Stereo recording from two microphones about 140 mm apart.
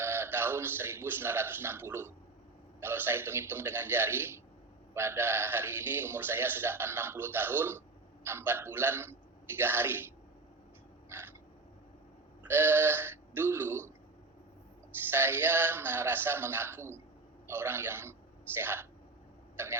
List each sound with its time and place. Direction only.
0.0 s a man's voice: 15° right (ahead or behind)
11.1 s crow: 15° right (ahead or behind)
12.4 s speech: 15° right (ahead or behind)
15.1 s speech: 15° right (ahead or behind)
19.5 s a sound: 15° right (ahead or behind)